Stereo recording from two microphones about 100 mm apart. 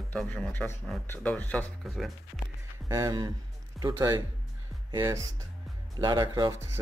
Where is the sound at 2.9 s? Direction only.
35° right (ahead or behind).